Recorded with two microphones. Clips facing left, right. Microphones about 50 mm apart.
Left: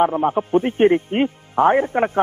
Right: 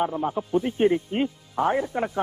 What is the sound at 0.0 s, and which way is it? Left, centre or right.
Speech, left.